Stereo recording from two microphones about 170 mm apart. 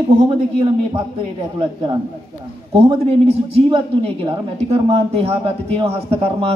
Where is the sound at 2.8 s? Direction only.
35° right (ahead or behind).